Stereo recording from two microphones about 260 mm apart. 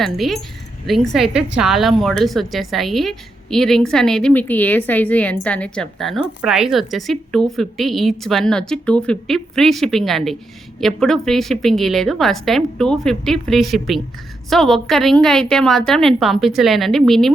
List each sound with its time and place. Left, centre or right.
0.0 s a woman's voice: centre